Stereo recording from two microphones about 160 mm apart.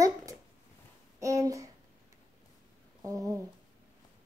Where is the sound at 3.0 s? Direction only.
20° right (ahead or behind).